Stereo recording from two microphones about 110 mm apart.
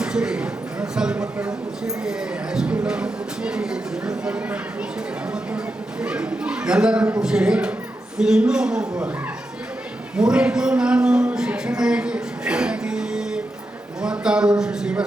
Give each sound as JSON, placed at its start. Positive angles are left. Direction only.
{"t": 0.0, "sound": "speech", "side_deg": -5}
{"t": 6.0, "sound": "a man's voice", "side_deg": -10}
{"t": 10.2, "sound": "a sound", "side_deg": -10}
{"t": 14.0, "sound": "speech", "side_deg": -10}